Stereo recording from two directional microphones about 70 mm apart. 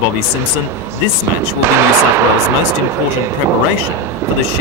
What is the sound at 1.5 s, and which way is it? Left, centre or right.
Speech, right.